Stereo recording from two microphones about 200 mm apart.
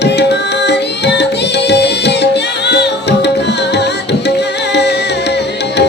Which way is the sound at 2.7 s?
55° left (ahead or behind).